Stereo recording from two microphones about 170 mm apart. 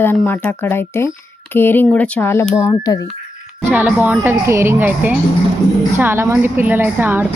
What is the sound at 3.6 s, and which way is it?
A woman's voice, 10° right (ahead or behind).